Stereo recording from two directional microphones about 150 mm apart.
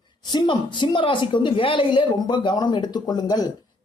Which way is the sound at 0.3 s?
30° left (ahead or behind).